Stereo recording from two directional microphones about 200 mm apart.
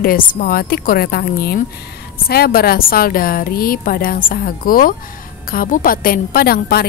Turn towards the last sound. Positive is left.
turn(degrees=50)  # may be behind; listen again after turning